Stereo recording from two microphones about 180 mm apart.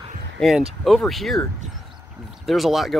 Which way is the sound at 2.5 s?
Centre (ahead or behind).